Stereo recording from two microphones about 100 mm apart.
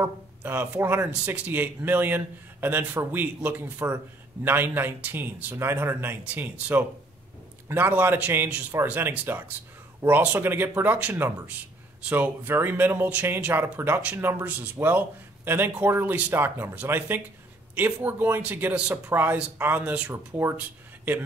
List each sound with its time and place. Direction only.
0.0 s a man's voice: 20° right (ahead or behind)